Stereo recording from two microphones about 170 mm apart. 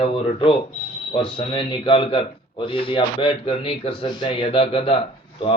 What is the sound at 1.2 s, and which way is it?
A man's voice, 30° left (ahead or behind).